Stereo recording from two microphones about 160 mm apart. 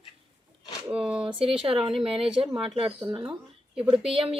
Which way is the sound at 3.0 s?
5° right (ahead or behind).